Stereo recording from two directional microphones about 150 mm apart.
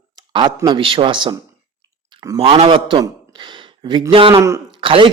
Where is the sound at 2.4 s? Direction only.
40° right (ahead or behind).